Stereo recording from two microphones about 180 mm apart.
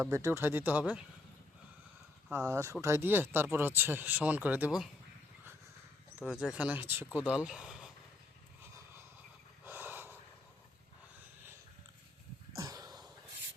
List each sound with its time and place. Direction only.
0.0 s speech: 15° right (ahead or behind)
2.3 s speech: 10° right (ahead or behind)
6.2 s speech: 5° right (ahead or behind)
9.6 s snort: 10° right (ahead or behind)
12.5 s a sound: 20° right (ahead or behind)